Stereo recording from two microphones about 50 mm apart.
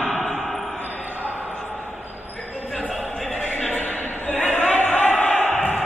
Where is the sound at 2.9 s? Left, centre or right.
Centre.